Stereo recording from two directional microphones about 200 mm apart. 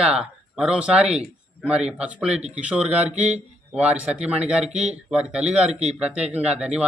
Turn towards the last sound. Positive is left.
turn(degrees=-5)  # may be behind; listen again after turning